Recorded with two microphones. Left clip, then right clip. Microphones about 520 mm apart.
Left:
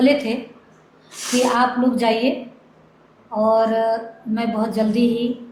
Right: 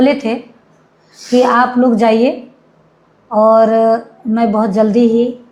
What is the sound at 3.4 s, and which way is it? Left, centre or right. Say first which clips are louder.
A woman's voice: right 8 dB; right.